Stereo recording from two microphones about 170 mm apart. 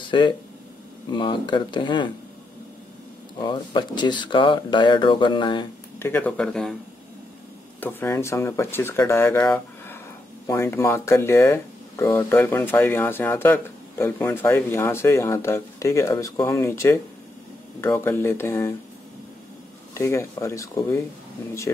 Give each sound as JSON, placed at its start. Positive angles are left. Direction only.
{"t": 1.1, "sound": "speech", "side_deg": 30}
{"t": 3.3, "sound": "speech", "side_deg": 25}
{"t": 5.9, "sound": "speech", "side_deg": 15}
{"t": 7.8, "sound": "speech", "side_deg": 15}
{"t": 19.9, "sound": "speech", "side_deg": 15}